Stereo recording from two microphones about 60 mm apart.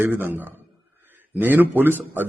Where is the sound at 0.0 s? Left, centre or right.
Right.